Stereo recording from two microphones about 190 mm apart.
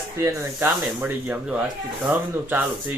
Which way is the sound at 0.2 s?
15° right (ahead or behind).